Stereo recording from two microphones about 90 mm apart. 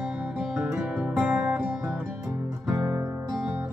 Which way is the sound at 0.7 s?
20° right (ahead or behind).